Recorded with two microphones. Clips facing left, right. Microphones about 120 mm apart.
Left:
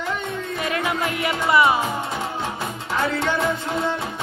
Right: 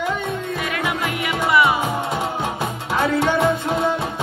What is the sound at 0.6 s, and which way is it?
Music, 35° left (ahead or behind).